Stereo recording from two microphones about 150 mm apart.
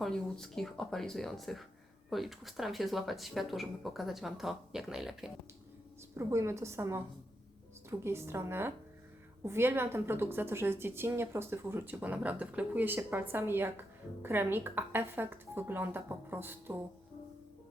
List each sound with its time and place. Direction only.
0.0 s speech: 5° left (ahead or behind)
6.1 s a woman's voice: 20° right (ahead or behind)